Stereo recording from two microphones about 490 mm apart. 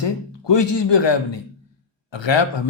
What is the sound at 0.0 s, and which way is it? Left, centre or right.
A man's voice, left.